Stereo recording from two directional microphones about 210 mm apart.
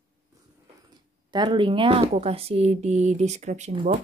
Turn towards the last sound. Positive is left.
turn(degrees=-35)  # may be behind; listen again after turning